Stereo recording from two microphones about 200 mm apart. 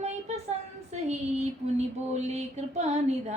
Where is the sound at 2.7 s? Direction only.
35° right (ahead or behind).